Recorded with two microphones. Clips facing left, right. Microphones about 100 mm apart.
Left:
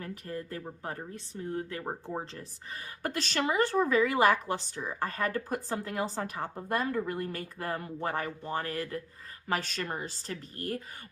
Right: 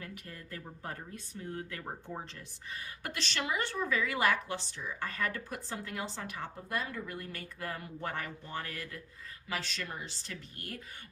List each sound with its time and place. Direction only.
0.0 s a woman's voice: 35° left (ahead or behind)